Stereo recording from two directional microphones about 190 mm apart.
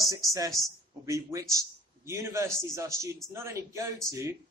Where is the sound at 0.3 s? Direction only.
20° right (ahead or behind).